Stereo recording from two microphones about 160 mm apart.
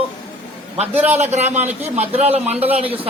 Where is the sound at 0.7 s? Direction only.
40° right (ahead or behind).